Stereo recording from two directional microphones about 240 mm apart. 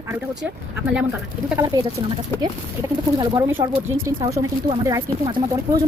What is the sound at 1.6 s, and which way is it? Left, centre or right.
Speech, centre.